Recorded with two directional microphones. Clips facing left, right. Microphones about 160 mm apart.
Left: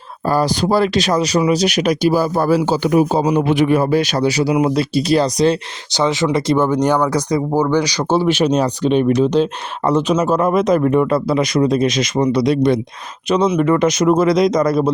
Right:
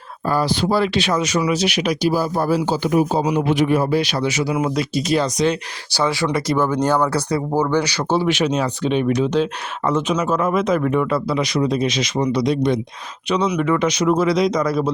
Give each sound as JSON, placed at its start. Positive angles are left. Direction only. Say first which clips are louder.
{"t": 0.3, "sound": "speech", "louder": "left 3 dB", "side_deg": 40}
{"t": 2.1, "sound": "a man's voice", "louder": "left 4 dB", "side_deg": 85}
{"t": 3.4, "sound": "speech", "louder": "left 3 dB", "side_deg": 65}
{"t": 5.9, "sound": "speech", "louder": "left 3 dB", "side_deg": 20}
{"t": 8.3, "sound": "speech", "louder": "left 4 dB", "side_deg": 35}
{"t": 13.2, "sound": "speech", "louder": "left 4 dB", "side_deg": 45}